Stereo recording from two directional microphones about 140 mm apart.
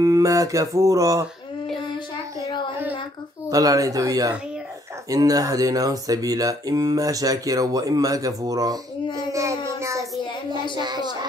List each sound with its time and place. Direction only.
0.0 s speech: 25° right (ahead or behind)
3.4 s speech: 25° right (ahead or behind)
9.7 s child singing: 20° right (ahead or behind)
10.8 s music: 30° right (ahead or behind)